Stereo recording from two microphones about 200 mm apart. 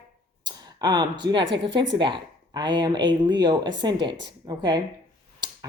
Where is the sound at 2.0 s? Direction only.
25° right (ahead or behind).